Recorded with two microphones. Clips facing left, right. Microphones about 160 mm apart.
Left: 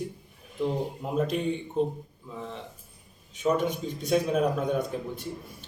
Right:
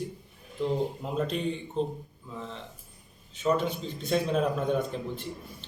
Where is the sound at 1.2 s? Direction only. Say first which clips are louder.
Left 3 dB; 10° left (ahead or behind).